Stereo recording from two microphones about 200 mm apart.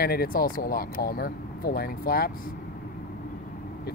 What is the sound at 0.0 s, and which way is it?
Speech, 50° left (ahead or behind).